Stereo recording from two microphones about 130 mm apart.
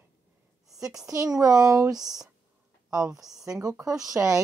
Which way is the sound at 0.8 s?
25° right (ahead or behind).